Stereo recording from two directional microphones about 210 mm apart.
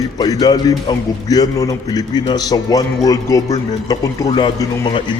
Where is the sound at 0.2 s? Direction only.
20° left (ahead or behind).